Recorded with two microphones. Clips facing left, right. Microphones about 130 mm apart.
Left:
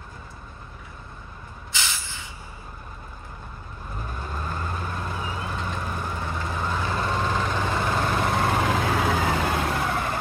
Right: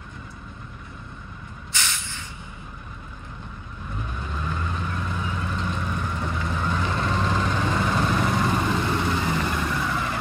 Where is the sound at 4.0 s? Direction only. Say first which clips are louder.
Even; 40° left (ahead or behind).